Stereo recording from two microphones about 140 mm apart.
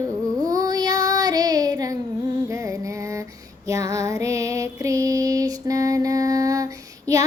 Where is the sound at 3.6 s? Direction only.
20° right (ahead or behind).